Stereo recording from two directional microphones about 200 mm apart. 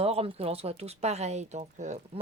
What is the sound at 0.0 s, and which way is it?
Speech, 30° right (ahead or behind).